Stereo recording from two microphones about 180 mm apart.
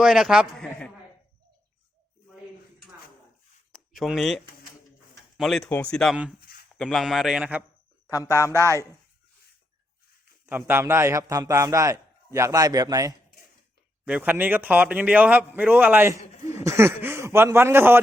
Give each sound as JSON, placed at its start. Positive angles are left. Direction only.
{"t": 0.0, "sound": "a man's voice", "side_deg": 0}
{"t": 3.7, "sound": "a sound", "side_deg": 0}
{"t": 5.4, "sound": "a man's voice", "side_deg": 0}
{"t": 6.4, "sound": "a sound", "side_deg": 60}
{"t": 6.7, "sound": "a man's voice", "side_deg": 0}
{"t": 8.1, "sound": "speech", "side_deg": 20}
{"t": 10.4, "sound": "a man's voice", "side_deg": -10}